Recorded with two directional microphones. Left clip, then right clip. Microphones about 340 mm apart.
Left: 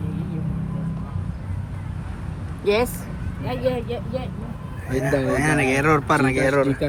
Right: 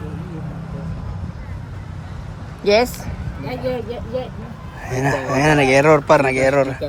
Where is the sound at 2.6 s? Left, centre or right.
Right.